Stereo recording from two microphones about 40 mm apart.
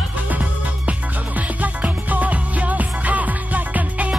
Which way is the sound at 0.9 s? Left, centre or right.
Right.